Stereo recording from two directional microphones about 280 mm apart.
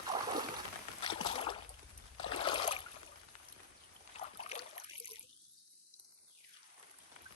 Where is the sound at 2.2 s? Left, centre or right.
Centre.